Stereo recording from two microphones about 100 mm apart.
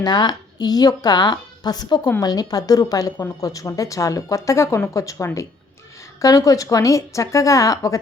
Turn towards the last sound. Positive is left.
turn(degrees=35)  # may be behind; listen again after turning